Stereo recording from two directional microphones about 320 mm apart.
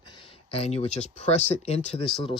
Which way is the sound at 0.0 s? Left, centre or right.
Centre.